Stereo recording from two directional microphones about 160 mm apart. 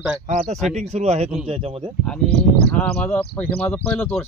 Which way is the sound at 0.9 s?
45° right (ahead or behind).